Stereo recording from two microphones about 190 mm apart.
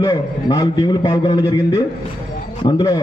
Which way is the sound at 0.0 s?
20° left (ahead or behind).